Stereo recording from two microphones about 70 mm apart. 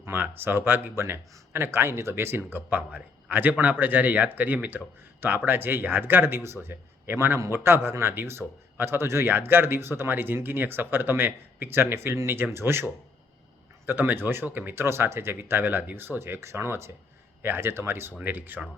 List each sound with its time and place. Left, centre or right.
0.0 s speech: right
18.2 s speech: right